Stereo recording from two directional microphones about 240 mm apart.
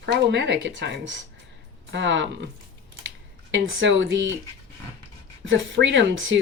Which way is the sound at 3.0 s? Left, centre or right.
Right.